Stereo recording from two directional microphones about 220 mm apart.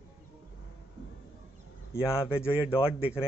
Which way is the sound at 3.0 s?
5° right (ahead or behind).